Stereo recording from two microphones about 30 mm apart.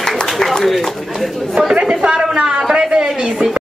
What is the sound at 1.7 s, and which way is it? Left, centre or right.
Speech, right.